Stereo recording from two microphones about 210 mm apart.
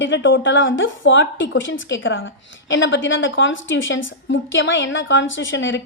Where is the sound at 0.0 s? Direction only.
60° left (ahead or behind).